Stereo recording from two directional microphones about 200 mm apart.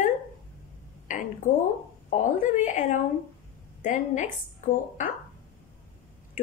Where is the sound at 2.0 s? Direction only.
40° left (ahead or behind).